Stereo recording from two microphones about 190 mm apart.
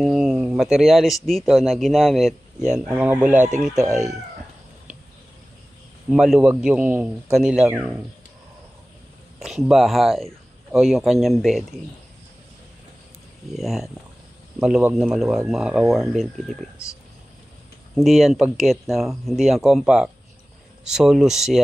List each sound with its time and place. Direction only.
0.0 s speech: centre (ahead or behind)
3.3 s speech: 40° right (ahead or behind)
6.0 s speech: 5° right (ahead or behind)
9.4 s speech: centre (ahead or behind)
13.6 s speech: centre (ahead or behind)
17.9 s speech: centre (ahead or behind)